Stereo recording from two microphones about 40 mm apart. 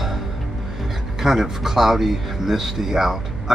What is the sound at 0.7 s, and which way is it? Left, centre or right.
Speech, centre.